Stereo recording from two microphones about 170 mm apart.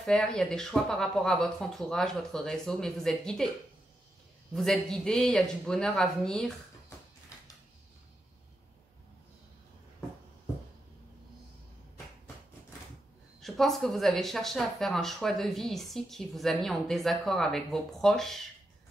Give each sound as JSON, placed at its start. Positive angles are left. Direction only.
{"t": 0.0, "sound": "speech", "side_deg": 5}
{"t": 4.6, "sound": "speech", "side_deg": 0}
{"t": 13.4, "sound": "speech", "side_deg": 0}